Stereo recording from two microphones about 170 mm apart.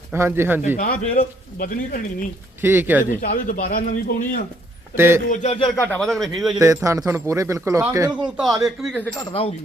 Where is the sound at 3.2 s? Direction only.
55° left (ahead or behind).